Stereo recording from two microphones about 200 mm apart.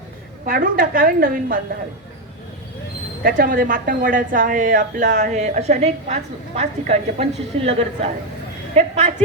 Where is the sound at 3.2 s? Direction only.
45° right (ahead or behind).